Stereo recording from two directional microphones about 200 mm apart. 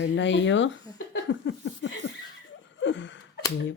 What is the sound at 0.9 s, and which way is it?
Laughter, 65° left (ahead or behind).